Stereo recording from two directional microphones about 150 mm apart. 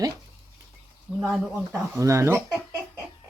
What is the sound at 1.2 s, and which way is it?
Speech, 5° right (ahead or behind).